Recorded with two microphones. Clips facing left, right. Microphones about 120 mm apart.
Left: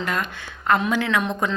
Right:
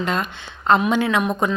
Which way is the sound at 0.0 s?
20° right (ahead or behind).